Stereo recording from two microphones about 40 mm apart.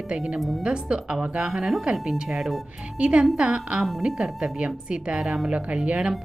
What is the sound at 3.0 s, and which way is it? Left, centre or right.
Speech, right.